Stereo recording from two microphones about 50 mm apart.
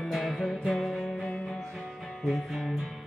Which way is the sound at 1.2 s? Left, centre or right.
Left.